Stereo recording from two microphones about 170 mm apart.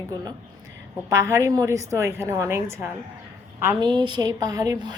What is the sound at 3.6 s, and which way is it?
A woman's voice, 20° right (ahead or behind).